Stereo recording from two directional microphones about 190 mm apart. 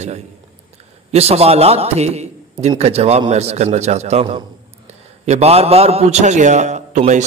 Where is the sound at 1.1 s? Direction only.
35° right (ahead or behind).